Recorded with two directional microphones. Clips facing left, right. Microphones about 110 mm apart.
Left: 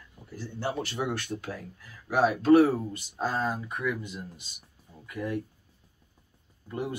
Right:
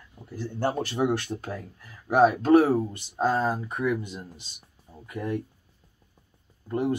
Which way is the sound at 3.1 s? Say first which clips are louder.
Right 5 dB; 25° right (ahead or behind).